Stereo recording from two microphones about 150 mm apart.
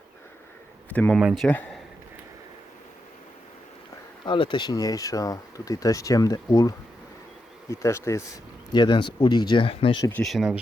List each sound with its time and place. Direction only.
0.9 s speech: 10° left (ahead or behind)
1.2 s speech: centre (ahead or behind)
4.3 s speech: 35° left (ahead or behind)
10.1 s speech: 10° left (ahead or behind)
10.3 s speech: 5° right (ahead or behind)